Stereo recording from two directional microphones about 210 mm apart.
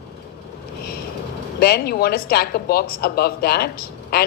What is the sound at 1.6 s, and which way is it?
A woman's voice, 45° left (ahead or behind).